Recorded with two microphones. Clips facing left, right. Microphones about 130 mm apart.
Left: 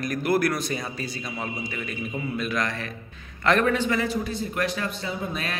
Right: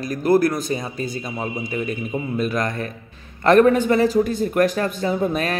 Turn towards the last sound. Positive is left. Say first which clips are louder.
# right 9 dB
turn(degrees=-45)  # may be behind; listen again after turning